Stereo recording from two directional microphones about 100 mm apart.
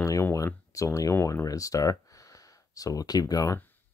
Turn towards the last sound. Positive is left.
turn(degrees=35)  # may be behind; listen again after turning